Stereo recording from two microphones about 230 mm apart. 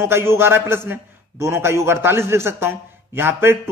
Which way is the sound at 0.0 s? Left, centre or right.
Centre.